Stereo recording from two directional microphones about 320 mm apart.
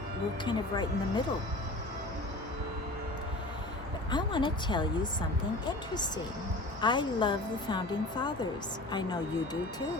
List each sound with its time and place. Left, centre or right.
0.4 s a woman's voice: centre
4.1 s a woman's voice: centre